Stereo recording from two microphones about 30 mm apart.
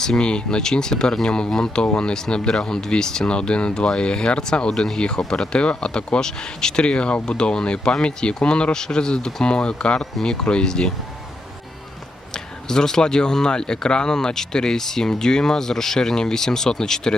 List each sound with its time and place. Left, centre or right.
0.2 s speech: left
1.8 s speech: left
3.3 s speech: left
4.7 s speech: centre
4.9 s speech: left
12.3 s speech: centre